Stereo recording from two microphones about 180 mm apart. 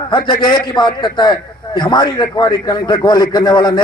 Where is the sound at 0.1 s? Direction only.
25° left (ahead or behind).